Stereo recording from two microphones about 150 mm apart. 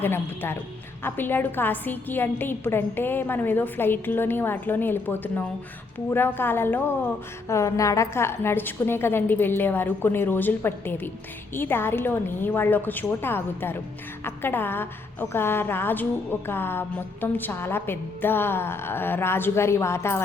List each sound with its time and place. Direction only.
0.0 s a woman's voice: 15° left (ahead or behind)